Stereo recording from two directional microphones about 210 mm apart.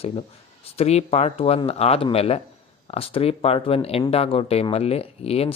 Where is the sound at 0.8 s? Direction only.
30° left (ahead or behind).